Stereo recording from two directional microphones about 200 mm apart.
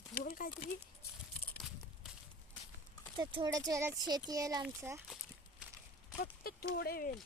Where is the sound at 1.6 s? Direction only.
5° right (ahead or behind).